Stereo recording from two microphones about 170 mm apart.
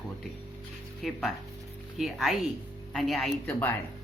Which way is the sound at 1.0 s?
Centre (ahead or behind).